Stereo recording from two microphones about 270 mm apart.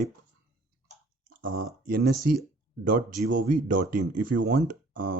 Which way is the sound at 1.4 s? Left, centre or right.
Right.